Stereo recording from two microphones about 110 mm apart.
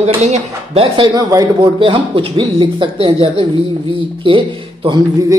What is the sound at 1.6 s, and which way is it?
Speech, 50° right (ahead or behind).